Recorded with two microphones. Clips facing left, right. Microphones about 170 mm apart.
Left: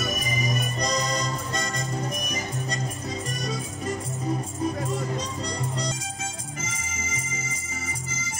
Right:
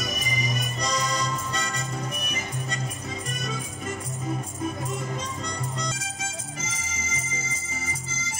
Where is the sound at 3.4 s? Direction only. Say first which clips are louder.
Left 3 dB; 35° left (ahead or behind).